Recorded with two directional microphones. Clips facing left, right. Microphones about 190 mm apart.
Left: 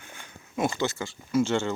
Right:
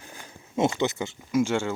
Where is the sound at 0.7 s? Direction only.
20° right (ahead or behind).